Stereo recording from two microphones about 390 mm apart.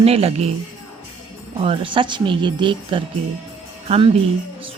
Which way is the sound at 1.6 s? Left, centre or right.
Centre.